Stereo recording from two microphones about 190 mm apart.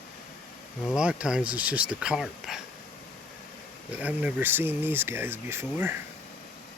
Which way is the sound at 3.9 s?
5° right (ahead or behind).